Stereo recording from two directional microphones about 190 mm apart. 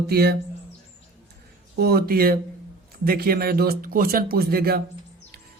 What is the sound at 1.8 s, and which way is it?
Speech, 55° right (ahead or behind).